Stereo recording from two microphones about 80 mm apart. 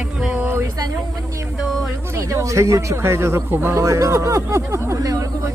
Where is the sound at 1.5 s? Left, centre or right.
Centre.